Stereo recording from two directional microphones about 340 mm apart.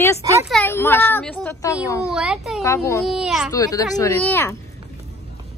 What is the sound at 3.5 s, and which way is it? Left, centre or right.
A woman's voice, centre.